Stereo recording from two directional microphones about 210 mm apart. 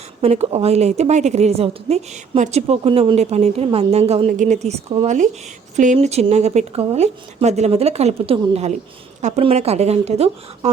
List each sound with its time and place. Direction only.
0.2 s a woman's voice: 30° right (ahead or behind)